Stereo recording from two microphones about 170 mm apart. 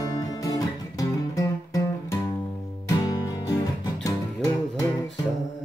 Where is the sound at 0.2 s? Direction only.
20° left (ahead or behind).